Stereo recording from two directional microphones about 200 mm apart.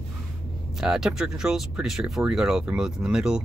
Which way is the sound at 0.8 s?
5° right (ahead or behind).